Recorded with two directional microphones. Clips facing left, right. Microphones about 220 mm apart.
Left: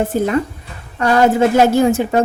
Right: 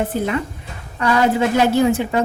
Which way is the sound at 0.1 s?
45° left (ahead or behind).